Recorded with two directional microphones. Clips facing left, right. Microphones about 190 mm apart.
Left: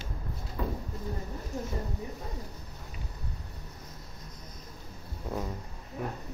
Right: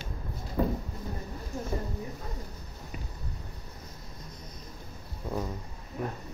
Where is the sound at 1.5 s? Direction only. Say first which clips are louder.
Even; 20° left (ahead or behind).